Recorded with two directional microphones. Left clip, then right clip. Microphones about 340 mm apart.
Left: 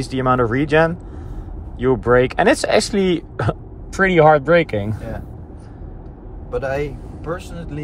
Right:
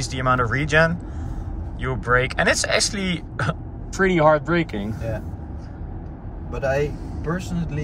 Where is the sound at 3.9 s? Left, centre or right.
Centre.